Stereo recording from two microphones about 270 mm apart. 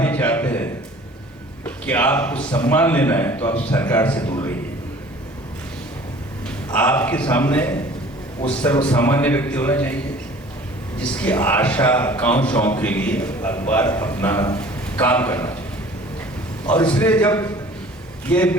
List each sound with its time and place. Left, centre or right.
0.0 s a sound: centre
1.6 s a man's voice: centre
4.3 s a man's voice: centre
6.7 s a man's voice: centre
11.0 s a man's voice: centre
16.6 s a man's voice: centre